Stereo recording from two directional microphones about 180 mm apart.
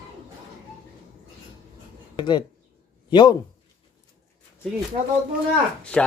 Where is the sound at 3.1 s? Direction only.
25° left (ahead or behind).